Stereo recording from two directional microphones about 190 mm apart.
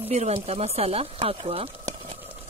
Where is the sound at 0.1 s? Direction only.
35° right (ahead or behind).